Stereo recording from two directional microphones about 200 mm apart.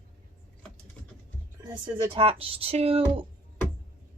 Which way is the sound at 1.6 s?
25° right (ahead or behind).